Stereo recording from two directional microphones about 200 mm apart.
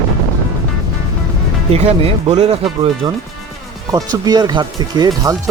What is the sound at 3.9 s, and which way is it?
Speech, 20° right (ahead or behind).